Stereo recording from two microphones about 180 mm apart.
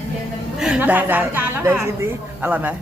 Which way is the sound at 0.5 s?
5° right (ahead or behind).